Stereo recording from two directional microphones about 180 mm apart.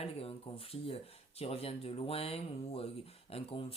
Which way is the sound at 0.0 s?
30° left (ahead or behind).